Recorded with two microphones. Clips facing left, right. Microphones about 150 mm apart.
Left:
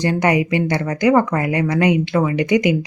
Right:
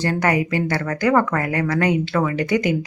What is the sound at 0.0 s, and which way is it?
Speech, 15° left (ahead or behind).